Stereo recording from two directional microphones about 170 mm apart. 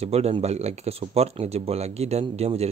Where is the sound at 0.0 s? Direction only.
35° right (ahead or behind).